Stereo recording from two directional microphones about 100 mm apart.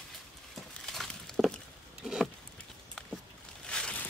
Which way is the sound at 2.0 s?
5° right (ahead or behind).